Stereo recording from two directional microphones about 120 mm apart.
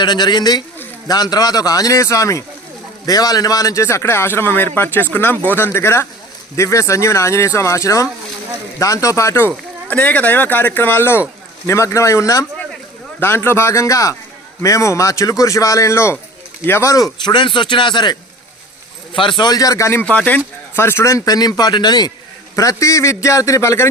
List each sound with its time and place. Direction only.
0.0 s a man's voice: 35° left (ahead or behind)
17.3 s a man's voice: 40° left (ahead or behind); by 20.1 s 25° left (ahead or behind)
20.1 s a man's voice: 10° left (ahead or behind)